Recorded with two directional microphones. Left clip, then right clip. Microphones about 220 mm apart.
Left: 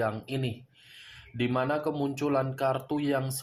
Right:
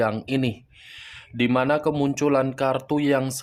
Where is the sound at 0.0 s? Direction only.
45° right (ahead or behind).